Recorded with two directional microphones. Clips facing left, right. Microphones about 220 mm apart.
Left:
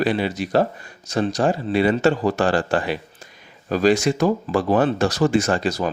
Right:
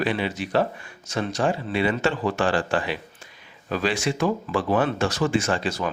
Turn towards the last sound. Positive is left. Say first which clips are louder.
# left 4 dB
turn(degrees=40)  # may be behind; listen again after turning